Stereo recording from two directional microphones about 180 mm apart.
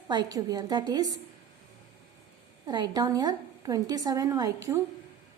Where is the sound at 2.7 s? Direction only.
20° right (ahead or behind).